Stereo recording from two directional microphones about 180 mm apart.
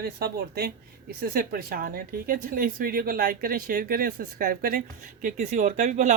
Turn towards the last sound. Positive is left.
turn(degrees=-40)  # may be behind; listen again after turning